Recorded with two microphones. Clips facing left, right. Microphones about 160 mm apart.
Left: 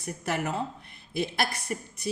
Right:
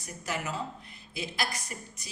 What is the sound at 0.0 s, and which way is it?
A woman's voice, 60° left (ahead or behind).